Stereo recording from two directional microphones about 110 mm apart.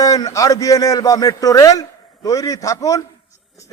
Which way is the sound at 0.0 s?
35° left (ahead or behind).